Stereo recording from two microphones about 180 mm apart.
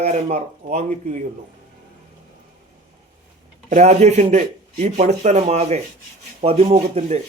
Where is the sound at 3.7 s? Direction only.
40° right (ahead or behind).